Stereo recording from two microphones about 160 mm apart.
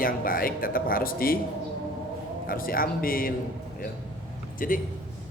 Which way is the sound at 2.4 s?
65° left (ahead or behind).